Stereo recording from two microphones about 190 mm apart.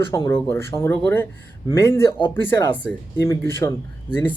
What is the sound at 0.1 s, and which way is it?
Speech, 20° left (ahead or behind).